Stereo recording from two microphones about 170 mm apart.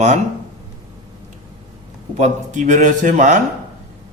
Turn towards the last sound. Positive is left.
turn(degrees=-45)  # may be behind; listen again after turning